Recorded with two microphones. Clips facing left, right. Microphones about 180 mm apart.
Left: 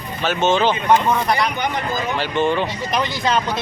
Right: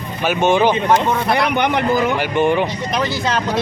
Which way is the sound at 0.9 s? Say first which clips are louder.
Right 1 dB; 65° right (ahead or behind).